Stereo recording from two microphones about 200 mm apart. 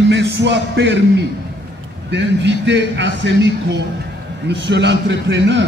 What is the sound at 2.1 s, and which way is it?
Speech, 60° right (ahead or behind).